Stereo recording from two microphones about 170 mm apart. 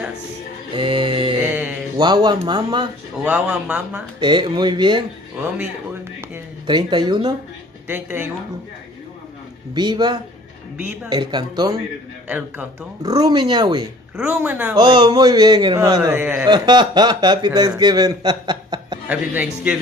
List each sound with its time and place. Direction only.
0.7 s music: 30° right (ahead or behind)
1.5 s music: 10° right (ahead or behind)
2.0 s a man's voice: 25° right (ahead or behind)
3.3 s a man's voice: 10° right (ahead or behind)
4.2 s a man's voice: 25° right (ahead or behind)
6.6 s a man's voice: 25° right (ahead or behind)
7.9 s a man's voice: 10° right (ahead or behind)
9.8 s a man's voice: 25° right (ahead or behind)
12.3 s a man's voice: 10° right (ahead or behind)
13.0 s a man's voice: 20° right (ahead or behind)
14.1 s a man's voice: 10° right (ahead or behind)
14.8 s a man's voice: 25° right (ahead or behind); by 16.4 s 10° right (ahead or behind)
16.4 s a man's voice: 25° right (ahead or behind)
19.0 s a man's voice: 10° right (ahead or behind)